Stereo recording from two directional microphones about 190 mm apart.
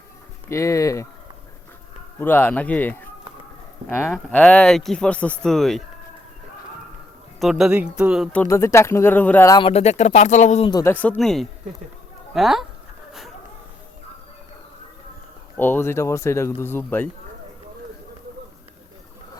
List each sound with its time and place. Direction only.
0.4 s speech: 15° left (ahead or behind)
2.1 s speech: 10° left (ahead or behind)
4.1 s speech: 5° left (ahead or behind)
7.3 s speech: centre (ahead or behind)
9.6 s speech: 30° left (ahead or behind)
10.7 s speech: 20° left (ahead or behind)
10.9 s speech: 5° left (ahead or behind)
15.5 s speech: 10° left (ahead or behind)